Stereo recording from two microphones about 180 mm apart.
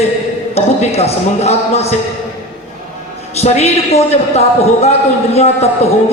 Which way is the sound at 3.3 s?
35° left (ahead or behind).